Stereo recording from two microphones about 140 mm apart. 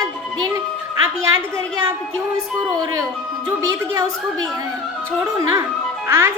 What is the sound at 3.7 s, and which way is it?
A woman's voice, 25° right (ahead or behind).